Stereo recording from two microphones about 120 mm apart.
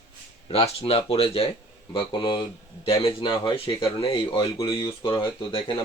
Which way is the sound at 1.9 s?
40° left (ahead or behind).